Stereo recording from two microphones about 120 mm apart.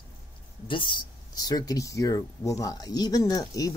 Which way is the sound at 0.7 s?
45° left (ahead or behind).